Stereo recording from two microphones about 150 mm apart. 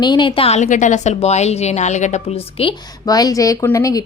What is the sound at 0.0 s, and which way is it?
A woman's voice, 30° left (ahead or behind).